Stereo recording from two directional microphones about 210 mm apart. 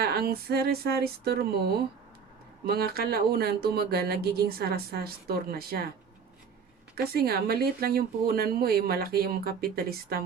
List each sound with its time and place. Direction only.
0.0 s speech: 50° right (ahead or behind)
6.9 s speech: 45° right (ahead or behind)